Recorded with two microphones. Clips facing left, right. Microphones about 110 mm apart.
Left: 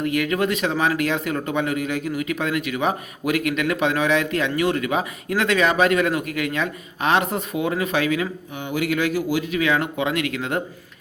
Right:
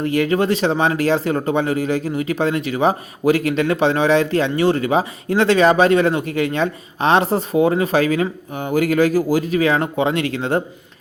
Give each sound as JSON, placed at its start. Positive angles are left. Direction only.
{"t": 0.0, "sound": "speech", "side_deg": -30}